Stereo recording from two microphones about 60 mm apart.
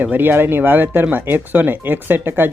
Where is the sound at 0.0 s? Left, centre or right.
Right.